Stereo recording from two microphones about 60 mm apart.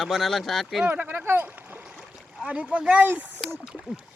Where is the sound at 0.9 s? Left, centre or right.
Right.